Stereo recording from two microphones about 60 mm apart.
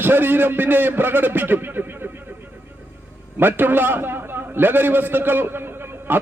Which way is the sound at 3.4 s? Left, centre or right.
Right.